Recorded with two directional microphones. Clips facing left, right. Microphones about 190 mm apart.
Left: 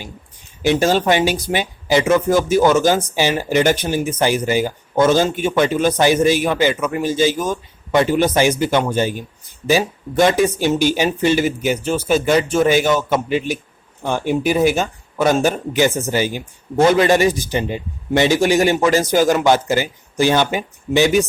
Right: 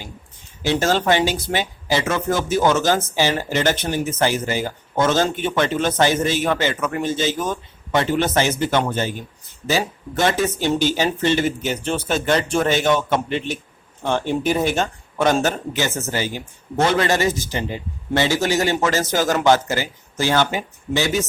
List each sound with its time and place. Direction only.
0.6 s speech: 15° left (ahead or behind)